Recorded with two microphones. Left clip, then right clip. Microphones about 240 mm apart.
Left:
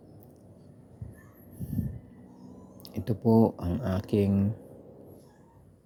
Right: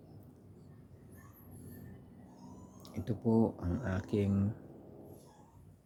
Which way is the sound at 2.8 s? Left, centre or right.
Centre.